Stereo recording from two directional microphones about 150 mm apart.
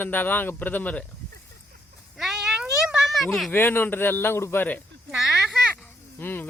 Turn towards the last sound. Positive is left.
turn(degrees=15)  # may be behind; listen again after turning